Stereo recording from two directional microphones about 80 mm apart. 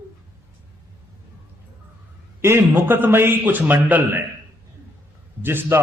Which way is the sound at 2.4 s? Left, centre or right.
Right.